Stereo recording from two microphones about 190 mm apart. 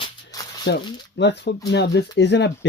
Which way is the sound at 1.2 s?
65° left (ahead or behind).